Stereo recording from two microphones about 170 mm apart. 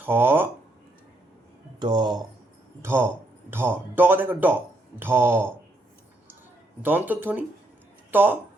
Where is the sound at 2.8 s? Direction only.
15° right (ahead or behind).